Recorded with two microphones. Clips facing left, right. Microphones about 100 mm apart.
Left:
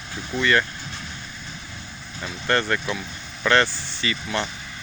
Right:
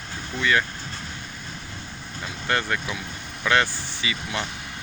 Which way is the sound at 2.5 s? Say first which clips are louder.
Left 3 dB; 5° right (ahead or behind).